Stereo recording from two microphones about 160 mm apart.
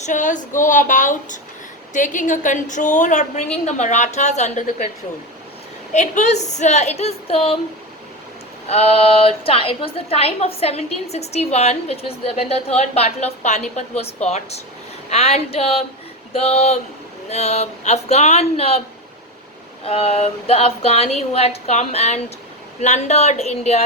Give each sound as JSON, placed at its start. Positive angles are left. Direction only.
{"t": 0.0, "sound": "a woman's voice", "side_deg": 50}
{"t": 5.9, "sound": "a woman's voice", "side_deg": 45}
{"t": 8.7, "sound": "a woman's voice", "side_deg": 40}
{"t": 19.8, "sound": "a woman's voice", "side_deg": 35}